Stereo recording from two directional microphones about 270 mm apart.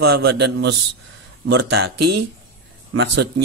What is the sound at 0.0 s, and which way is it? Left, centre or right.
Speech, right.